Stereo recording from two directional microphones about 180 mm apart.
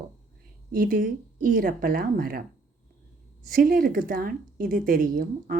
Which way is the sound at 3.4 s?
55° right (ahead or behind).